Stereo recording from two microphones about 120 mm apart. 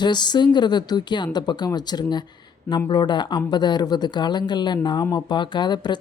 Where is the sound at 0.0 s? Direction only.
40° left (ahead or behind).